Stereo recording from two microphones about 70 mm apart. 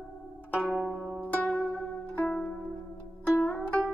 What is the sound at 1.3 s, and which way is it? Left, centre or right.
Music, left.